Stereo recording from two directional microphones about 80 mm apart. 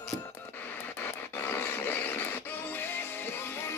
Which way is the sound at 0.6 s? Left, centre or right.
Left.